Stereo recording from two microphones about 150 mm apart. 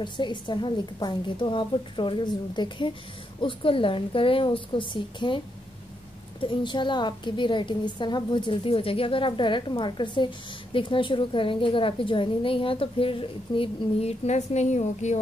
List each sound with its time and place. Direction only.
0.0 s a woman's voice: 30° left (ahead or behind)
6.4 s a woman's voice: 30° left (ahead or behind); by 15.1 s 50° left (ahead or behind)